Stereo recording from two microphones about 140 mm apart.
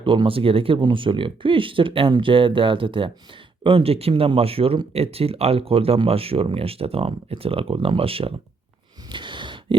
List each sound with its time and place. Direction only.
0.0 s speech: 35° right (ahead or behind)
9.1 s gasp: 35° right (ahead or behind)